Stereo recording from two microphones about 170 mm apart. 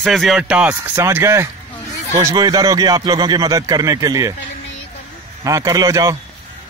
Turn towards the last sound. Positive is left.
turn(degrees=-20)  # may be behind; listen again after turning